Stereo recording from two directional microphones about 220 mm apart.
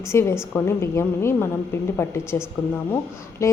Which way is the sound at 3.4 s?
15° left (ahead or behind).